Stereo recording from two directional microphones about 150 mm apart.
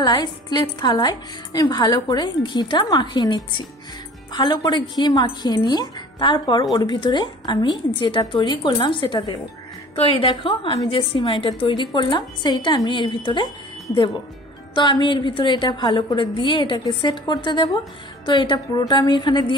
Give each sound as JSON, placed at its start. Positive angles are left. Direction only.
{"t": 0.0, "sound": "a woman's voice", "side_deg": 30}